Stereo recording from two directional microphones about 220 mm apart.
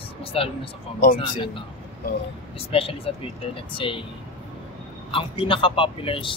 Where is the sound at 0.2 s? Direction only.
25° left (ahead or behind).